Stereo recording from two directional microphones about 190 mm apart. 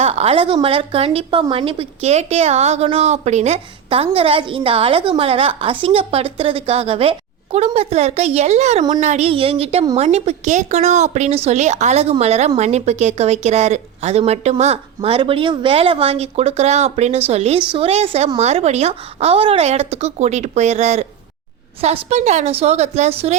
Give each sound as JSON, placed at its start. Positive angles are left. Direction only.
{"t": 0.0, "sound": "a woman's voice", "side_deg": -30}